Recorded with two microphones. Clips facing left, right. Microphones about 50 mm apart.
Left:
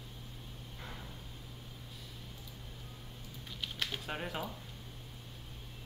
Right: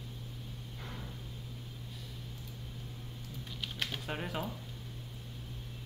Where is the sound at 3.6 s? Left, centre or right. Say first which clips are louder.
Even; centre.